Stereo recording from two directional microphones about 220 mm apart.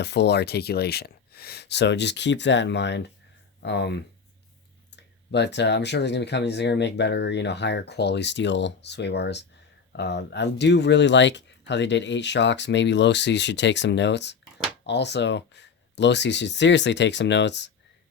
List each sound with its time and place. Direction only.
0.0 s speech: 50° left (ahead or behind)